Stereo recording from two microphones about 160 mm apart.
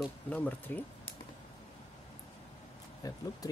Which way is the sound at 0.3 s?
10° left (ahead or behind).